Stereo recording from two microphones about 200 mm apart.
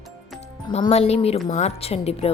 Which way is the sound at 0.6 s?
30° left (ahead or behind).